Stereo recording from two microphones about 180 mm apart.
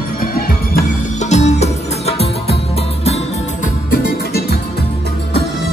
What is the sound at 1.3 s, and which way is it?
Music, 40° left (ahead or behind).